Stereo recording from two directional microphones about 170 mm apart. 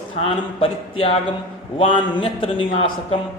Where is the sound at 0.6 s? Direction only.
35° left (ahead or behind).